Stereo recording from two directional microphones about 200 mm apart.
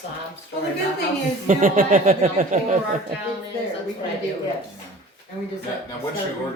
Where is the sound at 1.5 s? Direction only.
45° right (ahead or behind).